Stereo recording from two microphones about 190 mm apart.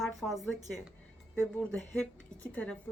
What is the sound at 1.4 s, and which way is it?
Speech, 5° left (ahead or behind).